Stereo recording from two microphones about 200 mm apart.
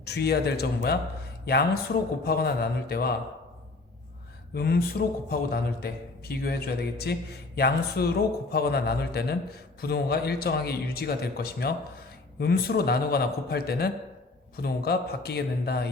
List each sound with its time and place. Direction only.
0.0 s a man's voice: 55° left (ahead or behind)
4.5 s a man's voice: 50° left (ahead or behind)